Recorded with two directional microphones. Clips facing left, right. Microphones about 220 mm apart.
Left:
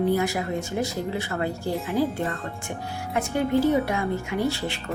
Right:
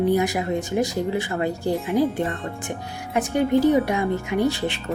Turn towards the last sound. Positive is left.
turn(degrees=-20)  # may be behind; listen again after turning